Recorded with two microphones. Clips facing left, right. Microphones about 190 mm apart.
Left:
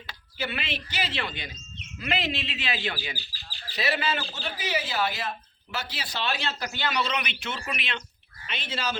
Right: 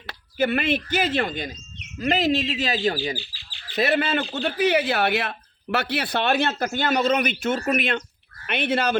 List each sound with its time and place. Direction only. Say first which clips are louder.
0.1 s speech: right 11 dB; 50° right (ahead or behind)
3.2 s bird: right 5 dB; 40° left (ahead or behind)
3.8 s a man's voice: right 7 dB; 55° right (ahead or behind)
8.4 s a man's voice: right 10 dB; 60° right (ahead or behind)